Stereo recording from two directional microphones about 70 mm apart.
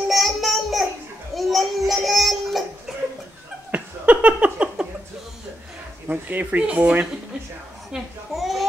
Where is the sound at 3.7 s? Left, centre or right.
Centre.